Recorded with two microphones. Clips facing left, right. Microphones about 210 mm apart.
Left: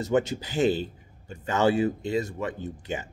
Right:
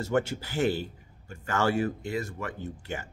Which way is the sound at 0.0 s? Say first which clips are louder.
Left 3 dB; 20° left (ahead or behind).